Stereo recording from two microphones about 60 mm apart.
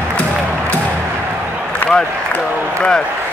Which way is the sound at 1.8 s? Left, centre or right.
Left.